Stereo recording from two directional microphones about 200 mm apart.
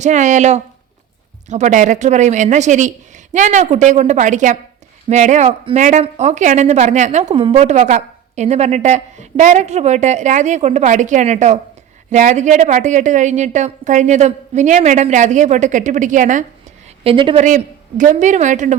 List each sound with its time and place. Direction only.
0.0 s a woman's voice: 35° right (ahead or behind)
17.0 s speech: 25° right (ahead or behind)
17.4 s a woman's voice: 40° right (ahead or behind)